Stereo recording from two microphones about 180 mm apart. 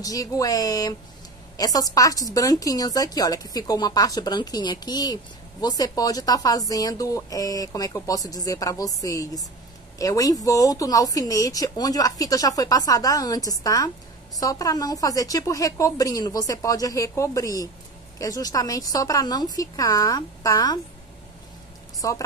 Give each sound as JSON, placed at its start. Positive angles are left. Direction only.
{"t": 0.0, "sound": "a woman's voice", "side_deg": 20}
{"t": 22.0, "sound": "a woman's voice", "side_deg": 20}